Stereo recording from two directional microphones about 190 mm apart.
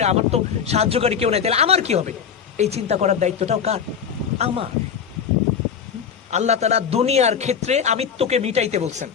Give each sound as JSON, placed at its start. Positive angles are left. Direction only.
{"t": 0.0, "sound": "a man's voice", "side_deg": -35}
{"t": 6.3, "sound": "a man's voice", "side_deg": -35}